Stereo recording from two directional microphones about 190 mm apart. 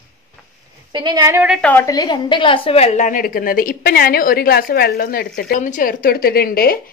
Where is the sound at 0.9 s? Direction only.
20° right (ahead or behind).